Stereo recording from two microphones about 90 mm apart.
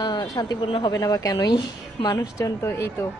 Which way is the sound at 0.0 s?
50° left (ahead or behind).